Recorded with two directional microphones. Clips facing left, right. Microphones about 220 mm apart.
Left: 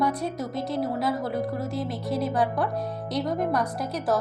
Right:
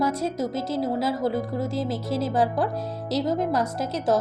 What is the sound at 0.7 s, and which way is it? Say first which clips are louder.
Speech: right 1 dB; 25° right (ahead or behind).